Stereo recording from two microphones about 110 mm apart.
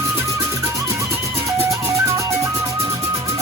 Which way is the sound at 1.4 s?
30° right (ahead or behind).